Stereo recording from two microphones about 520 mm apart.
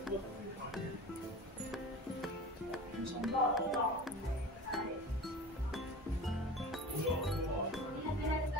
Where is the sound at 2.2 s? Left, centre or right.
Centre.